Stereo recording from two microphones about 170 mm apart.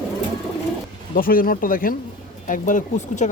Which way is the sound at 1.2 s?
55° left (ahead or behind).